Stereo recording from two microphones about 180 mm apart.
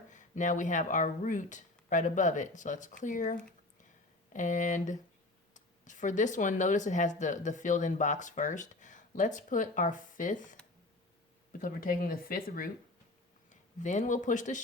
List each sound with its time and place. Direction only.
0.1 s speech: 45° left (ahead or behind)
11.6 s speech: 50° left (ahead or behind)
13.8 s speech: 45° left (ahead or behind)